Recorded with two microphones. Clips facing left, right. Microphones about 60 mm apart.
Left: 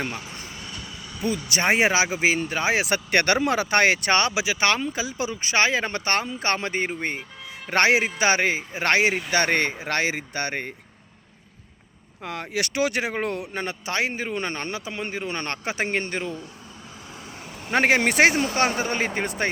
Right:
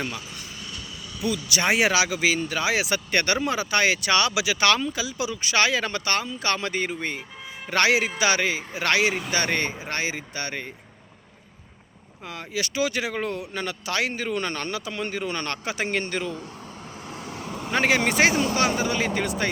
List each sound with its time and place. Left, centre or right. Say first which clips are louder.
1.2 s speech: left 1 dB; left
2.8 s speech: left 3 dB; left
4.3 s a man's voice: right 1 dB; left
12.2 s speech: left 2 dB; left
13.5 s a man's voice: even; left
17.7 s speech: left 2 dB; left